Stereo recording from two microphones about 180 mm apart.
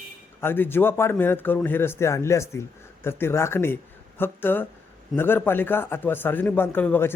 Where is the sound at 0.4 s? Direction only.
10° left (ahead or behind).